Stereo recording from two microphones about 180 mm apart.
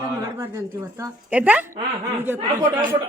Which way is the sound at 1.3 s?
10° right (ahead or behind).